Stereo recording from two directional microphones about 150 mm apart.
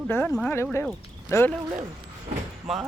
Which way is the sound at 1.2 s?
15° left (ahead or behind).